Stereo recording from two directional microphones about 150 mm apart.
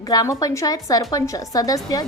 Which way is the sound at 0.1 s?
25° left (ahead or behind).